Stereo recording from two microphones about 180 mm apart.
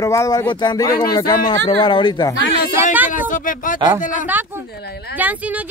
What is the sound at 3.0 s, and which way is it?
Speech, 45° left (ahead or behind).